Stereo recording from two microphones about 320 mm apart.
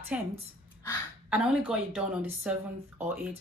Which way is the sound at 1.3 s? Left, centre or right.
Centre.